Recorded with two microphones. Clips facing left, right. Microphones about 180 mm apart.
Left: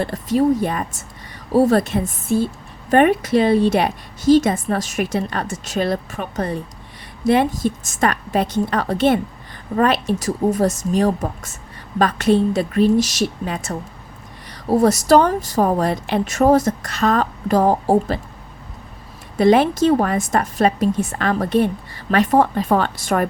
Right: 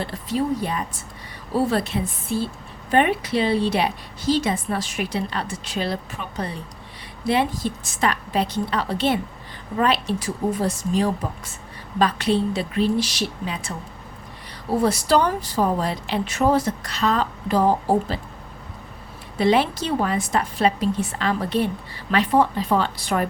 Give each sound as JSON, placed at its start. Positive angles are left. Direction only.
{"t": 0.0, "sound": "a woman's voice", "side_deg": 45}
{"t": 14.8, "sound": "a woman's voice", "side_deg": 45}
{"t": 19.4, "sound": "a woman's voice", "side_deg": 45}